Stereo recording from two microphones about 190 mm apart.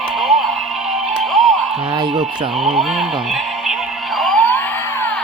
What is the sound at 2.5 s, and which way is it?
Synthetic singing, centre (ahead or behind).